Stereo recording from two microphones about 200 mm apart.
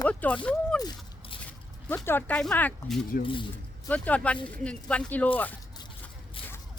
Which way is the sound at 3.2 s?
25° left (ahead or behind).